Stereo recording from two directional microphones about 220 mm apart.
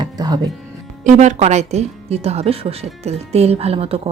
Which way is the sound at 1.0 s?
35° right (ahead or behind).